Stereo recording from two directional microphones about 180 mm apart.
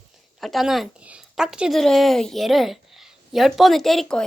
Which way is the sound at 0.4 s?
Centre (ahead or behind).